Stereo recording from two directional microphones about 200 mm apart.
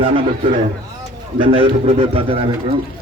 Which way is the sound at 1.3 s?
30° right (ahead or behind).